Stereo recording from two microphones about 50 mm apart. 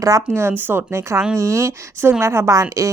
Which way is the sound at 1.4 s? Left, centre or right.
Right.